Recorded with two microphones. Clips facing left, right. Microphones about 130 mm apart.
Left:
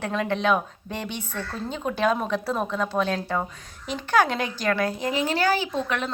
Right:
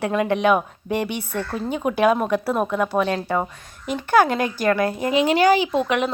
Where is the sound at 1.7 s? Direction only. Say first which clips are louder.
Right 5 dB; 10° right (ahead or behind).